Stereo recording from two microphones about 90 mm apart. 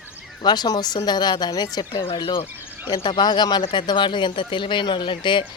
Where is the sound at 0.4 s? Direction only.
50° left (ahead or behind).